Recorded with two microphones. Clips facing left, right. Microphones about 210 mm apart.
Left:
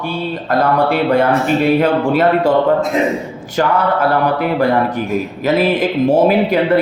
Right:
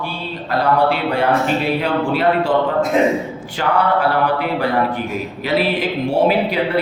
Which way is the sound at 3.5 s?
45° left (ahead or behind).